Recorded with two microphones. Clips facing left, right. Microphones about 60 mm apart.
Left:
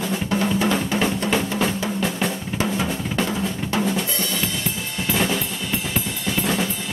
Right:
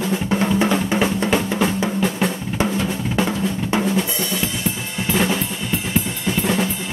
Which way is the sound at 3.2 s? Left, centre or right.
Right.